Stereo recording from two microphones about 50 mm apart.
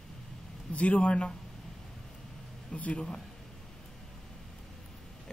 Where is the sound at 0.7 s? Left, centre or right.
Left.